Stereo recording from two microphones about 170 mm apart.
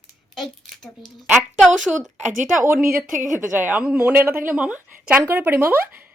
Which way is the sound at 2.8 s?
60° right (ahead or behind).